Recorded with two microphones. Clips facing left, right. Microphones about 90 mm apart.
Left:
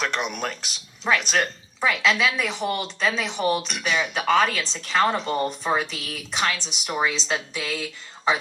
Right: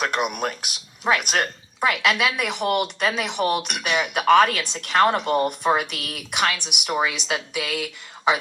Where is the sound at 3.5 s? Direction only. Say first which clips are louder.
Right 1 dB; 60° right (ahead or behind).